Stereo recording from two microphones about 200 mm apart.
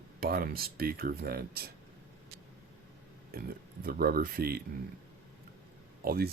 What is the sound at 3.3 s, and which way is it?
Speech, 50° right (ahead or behind).